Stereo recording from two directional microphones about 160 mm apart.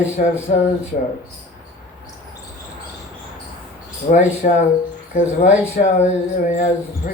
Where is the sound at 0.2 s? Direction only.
55° left (ahead or behind).